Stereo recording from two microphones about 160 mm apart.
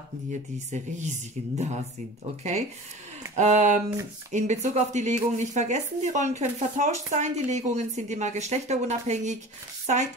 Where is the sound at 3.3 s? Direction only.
45° right (ahead or behind).